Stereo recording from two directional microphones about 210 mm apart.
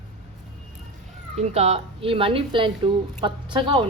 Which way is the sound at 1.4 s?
30° right (ahead or behind).